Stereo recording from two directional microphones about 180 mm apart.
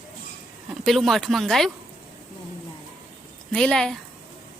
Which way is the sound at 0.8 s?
Centre (ahead or behind).